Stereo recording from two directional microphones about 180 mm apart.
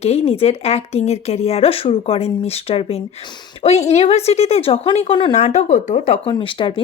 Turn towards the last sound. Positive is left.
turn(degrees=30)  # may be behind; listen again after turning